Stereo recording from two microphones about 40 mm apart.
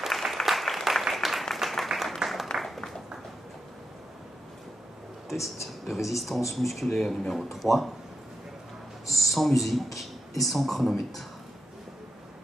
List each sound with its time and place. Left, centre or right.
0.0 s applause: centre
2.5 s a sound: centre
5.3 s a man's voice: centre
9.0 s speech: centre